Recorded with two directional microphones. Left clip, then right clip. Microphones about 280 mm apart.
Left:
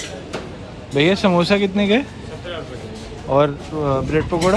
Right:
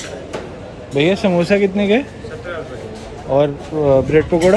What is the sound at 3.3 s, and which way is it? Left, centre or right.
Speech, centre.